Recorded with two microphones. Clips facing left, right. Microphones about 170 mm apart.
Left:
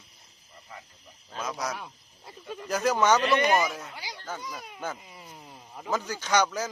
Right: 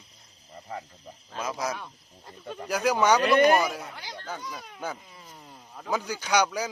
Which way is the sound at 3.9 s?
10° left (ahead or behind).